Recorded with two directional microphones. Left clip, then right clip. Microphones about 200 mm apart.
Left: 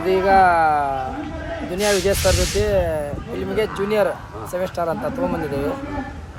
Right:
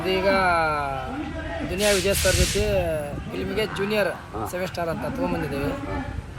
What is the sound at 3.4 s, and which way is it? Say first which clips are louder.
Speech: left 4 dB; 20° left (ahead or behind).